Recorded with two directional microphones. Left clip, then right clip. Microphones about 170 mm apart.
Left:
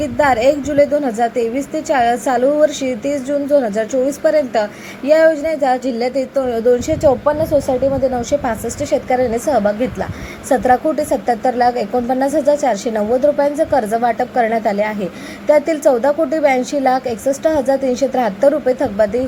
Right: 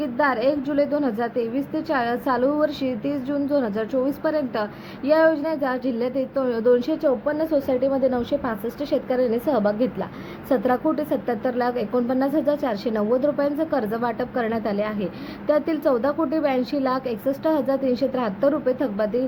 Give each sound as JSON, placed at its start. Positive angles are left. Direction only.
{"t": 0.0, "sound": "a woman's voice", "side_deg": 15}
{"t": 8.1, "sound": "a woman's voice", "side_deg": 10}